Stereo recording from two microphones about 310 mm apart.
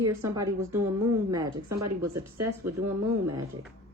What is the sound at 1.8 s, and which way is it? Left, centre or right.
Speech, right.